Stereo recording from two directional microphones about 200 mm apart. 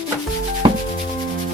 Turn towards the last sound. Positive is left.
turn(degrees=-25)  # may be behind; listen again after turning